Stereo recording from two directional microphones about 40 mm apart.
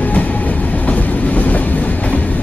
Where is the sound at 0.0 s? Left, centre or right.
Left.